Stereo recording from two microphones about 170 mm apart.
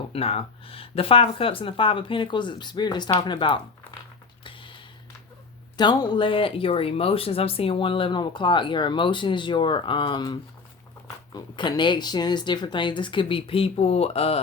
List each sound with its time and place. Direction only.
0.1 s speech: 35° left (ahead or behind)
4.4 s a sound: 30° left (ahead or behind)
5.7 s speech: 25° left (ahead or behind)
11.3 s speech: 25° left (ahead or behind)